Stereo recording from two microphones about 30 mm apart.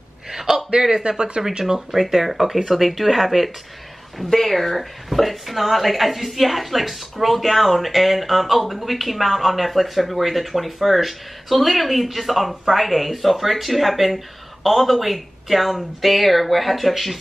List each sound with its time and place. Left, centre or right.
0.3 s a sound: centre
0.7 s speech: right
1.6 s speech: centre
2.0 s speech: centre
4.3 s speech: centre